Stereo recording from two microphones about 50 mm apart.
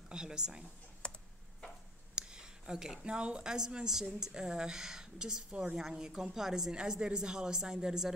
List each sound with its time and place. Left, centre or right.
0.1 s a woman's voice: centre
1.0 s computer keyboard: left
2.1 s a woman's voice: centre